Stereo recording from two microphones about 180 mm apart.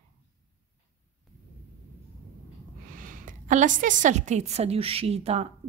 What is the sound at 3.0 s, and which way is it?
A woman's voice, 45° right (ahead or behind).